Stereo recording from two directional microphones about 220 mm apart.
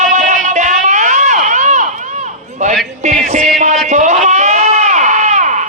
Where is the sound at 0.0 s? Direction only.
35° right (ahead or behind).